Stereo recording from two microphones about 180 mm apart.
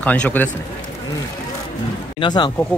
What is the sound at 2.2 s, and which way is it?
Speech, 25° left (ahead or behind).